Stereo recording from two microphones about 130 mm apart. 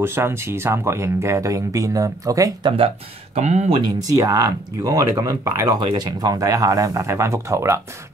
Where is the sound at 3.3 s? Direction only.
60° right (ahead or behind).